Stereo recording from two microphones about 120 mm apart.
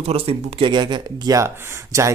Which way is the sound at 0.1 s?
55° right (ahead or behind).